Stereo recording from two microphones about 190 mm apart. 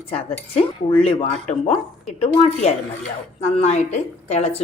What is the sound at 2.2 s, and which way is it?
Speech, 30° left (ahead or behind).